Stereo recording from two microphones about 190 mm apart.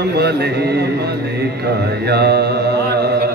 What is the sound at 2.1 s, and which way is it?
Mantra, 60° right (ahead or behind).